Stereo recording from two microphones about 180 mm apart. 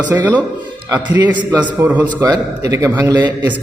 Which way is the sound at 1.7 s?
10° right (ahead or behind).